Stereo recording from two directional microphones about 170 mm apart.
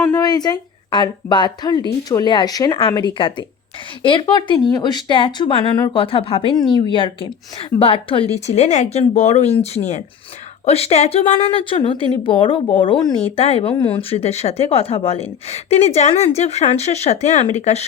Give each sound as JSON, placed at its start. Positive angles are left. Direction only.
{"t": 0.0, "sound": "a woman's voice", "side_deg": 15}